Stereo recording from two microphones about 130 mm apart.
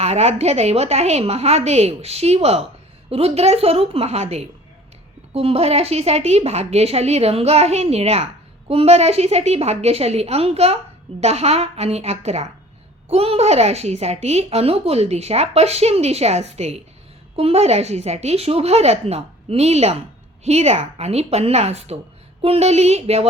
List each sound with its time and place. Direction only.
0.0 s a woman's voice: 55° right (ahead or behind)